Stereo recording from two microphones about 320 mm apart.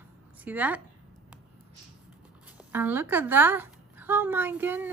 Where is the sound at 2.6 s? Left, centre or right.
Centre.